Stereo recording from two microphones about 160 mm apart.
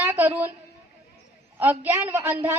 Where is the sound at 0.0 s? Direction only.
10° right (ahead or behind).